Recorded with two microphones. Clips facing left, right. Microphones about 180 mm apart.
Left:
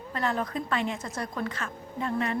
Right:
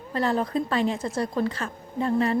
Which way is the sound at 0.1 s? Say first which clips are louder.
Right 5 dB; 30° right (ahead or behind).